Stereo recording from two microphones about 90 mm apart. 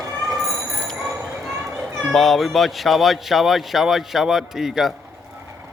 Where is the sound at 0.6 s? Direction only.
35° right (ahead or behind).